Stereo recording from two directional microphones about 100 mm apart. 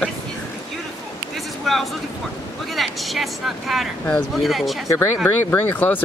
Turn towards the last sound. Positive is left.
turn(degrees=20)  # may be behind; listen again after turning